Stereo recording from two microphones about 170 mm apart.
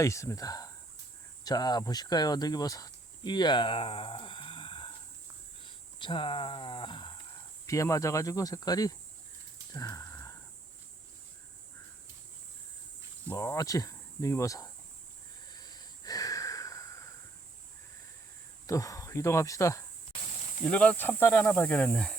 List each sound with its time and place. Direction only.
0.0 s speech: 15° left (ahead or behind)
9.7 s sniff: 20° left (ahead or behind)
13.2 s speech: 15° left (ahead or behind)
15.4 s wheeze: 25° left (ahead or behind)
18.6 s speech: 20° left (ahead or behind)
20.7 s speech: 5° left (ahead or behind)